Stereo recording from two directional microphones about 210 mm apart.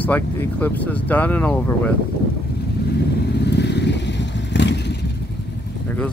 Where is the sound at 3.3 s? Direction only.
55° left (ahead or behind).